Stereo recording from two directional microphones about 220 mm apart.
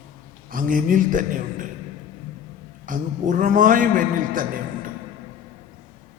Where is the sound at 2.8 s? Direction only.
35° right (ahead or behind).